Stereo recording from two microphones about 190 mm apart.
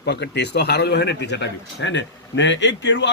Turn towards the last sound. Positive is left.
turn(degrees=70)  # may be behind; listen again after turning